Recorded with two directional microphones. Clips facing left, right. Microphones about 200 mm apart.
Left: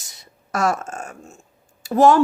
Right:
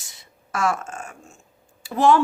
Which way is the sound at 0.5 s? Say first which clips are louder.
Left 3 dB; 40° left (ahead or behind).